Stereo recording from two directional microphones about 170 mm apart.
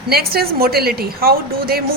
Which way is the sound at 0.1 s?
65° right (ahead or behind).